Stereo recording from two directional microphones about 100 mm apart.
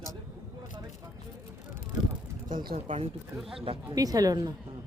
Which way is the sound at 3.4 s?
5° right (ahead or behind).